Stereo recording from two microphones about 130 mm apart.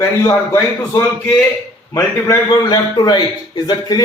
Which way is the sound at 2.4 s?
30° left (ahead or behind).